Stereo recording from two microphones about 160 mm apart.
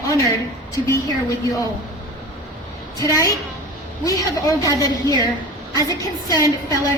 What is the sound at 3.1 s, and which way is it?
Speech, 20° left (ahead or behind).